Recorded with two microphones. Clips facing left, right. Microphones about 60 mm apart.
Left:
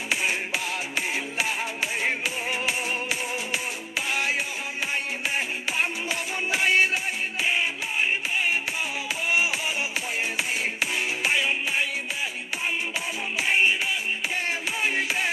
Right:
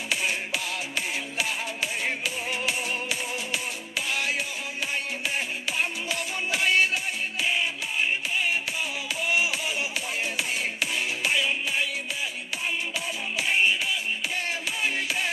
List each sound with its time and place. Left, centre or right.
0.1 s music: centre
5.8 s music: centre
10.3 s music: centre
13.4 s music: left
14.8 s music: centre